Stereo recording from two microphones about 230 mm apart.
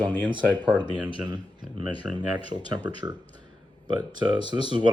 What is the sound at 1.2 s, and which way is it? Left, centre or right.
Speech, centre.